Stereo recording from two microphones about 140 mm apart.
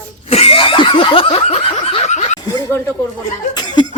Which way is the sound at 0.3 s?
45° left (ahead or behind).